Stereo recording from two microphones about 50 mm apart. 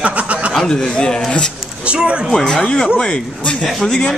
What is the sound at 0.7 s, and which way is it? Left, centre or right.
Speech, centre.